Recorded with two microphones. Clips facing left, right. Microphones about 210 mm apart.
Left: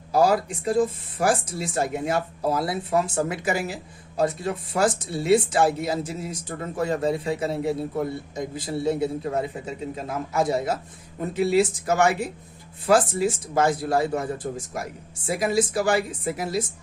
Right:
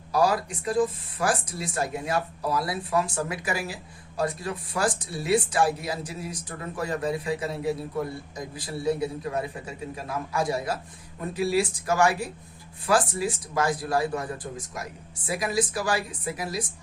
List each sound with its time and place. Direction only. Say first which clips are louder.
0.1 s speech: left 4 dB; 25° left (ahead or behind)